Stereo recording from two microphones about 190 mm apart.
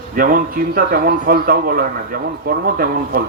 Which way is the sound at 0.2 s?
50° right (ahead or behind).